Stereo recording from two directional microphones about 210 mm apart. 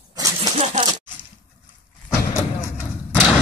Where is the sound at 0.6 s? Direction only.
35° right (ahead or behind).